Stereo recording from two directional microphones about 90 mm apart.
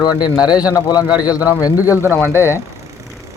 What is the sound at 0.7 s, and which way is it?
Speech, 45° left (ahead or behind).